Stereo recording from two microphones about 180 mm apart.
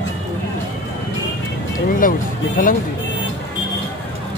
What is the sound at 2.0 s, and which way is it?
Speech, 50° left (ahead or behind).